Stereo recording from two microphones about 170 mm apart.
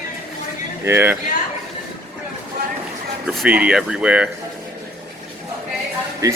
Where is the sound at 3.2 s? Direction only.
5° right (ahead or behind).